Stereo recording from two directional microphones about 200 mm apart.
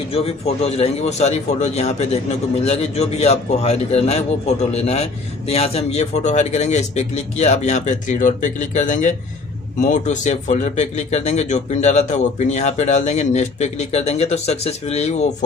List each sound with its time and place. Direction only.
0.1 s a man's voice: 30° left (ahead or behind)